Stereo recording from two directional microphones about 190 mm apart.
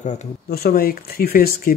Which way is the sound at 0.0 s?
40° left (ahead or behind).